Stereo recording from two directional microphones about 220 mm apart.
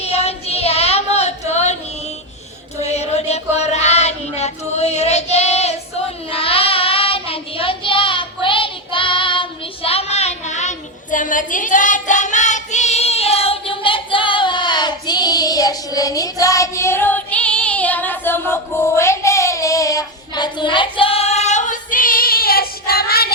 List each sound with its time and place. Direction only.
0.0 s child singing: 30° left (ahead or behind)
2.8 s child singing: 30° left (ahead or behind)